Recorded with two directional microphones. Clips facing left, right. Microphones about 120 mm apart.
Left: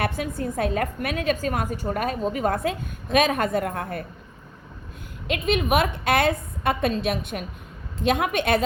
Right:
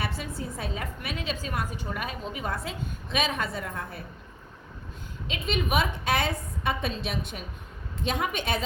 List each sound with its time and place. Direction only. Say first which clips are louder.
0.0 s a woman's voice: left 7 dB; 55° left (ahead or behind)
5.3 s a woman's voice: left 6 dB; 55° left (ahead or behind)